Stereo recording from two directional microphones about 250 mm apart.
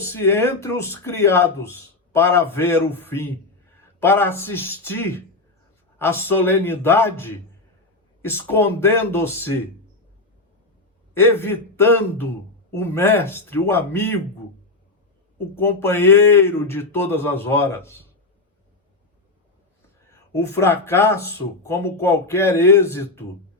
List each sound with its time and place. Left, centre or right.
0.0 s speech: centre
11.1 s speech: centre
15.5 s speech: centre
20.1 s speech: centre